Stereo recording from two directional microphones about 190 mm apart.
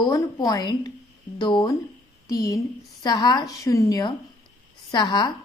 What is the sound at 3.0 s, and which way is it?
A woman's voice, 20° left (ahead or behind).